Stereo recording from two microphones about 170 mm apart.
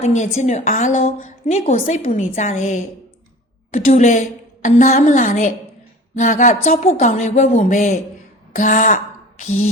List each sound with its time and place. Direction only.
0.0 s a woman's voice: 40° left (ahead or behind)